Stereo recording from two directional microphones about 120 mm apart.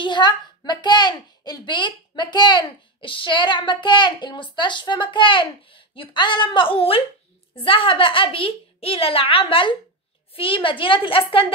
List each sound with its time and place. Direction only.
0.0 s a child's voice: 40° left (ahead or behind)